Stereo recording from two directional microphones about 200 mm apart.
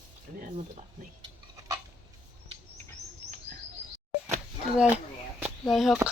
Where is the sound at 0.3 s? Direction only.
45° right (ahead or behind).